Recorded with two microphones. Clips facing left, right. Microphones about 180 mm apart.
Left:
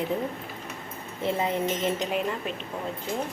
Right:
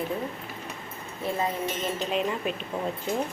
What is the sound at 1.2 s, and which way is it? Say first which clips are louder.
Speech: left 2 dB; 20° left (ahead or behind).